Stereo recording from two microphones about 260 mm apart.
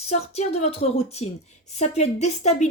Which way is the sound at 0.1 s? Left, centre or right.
Left.